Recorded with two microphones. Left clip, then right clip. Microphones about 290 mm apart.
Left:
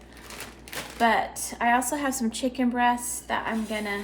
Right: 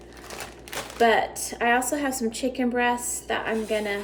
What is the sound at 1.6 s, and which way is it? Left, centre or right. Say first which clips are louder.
A woman's voice: right 1 dB; centre.